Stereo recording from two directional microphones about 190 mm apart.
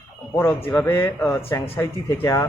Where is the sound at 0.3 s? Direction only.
10° left (ahead or behind).